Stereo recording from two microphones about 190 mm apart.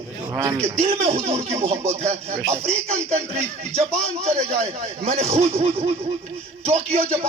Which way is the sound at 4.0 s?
35° right (ahead or behind).